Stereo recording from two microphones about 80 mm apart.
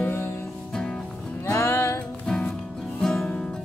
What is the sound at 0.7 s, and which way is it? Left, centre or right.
Music, centre.